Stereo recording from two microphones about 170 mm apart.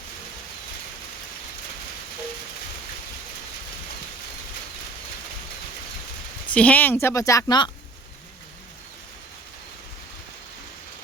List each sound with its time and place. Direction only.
6.5 s a woman's voice: 5° left (ahead or behind); by 7.7 s 25° left (ahead or behind)